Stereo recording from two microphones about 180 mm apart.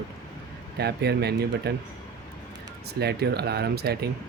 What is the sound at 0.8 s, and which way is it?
Speech, 65° right (ahead or behind).